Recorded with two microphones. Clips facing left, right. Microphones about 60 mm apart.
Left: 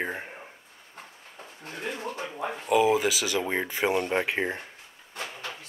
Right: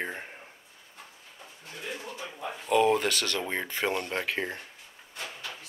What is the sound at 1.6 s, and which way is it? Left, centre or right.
Speech, left.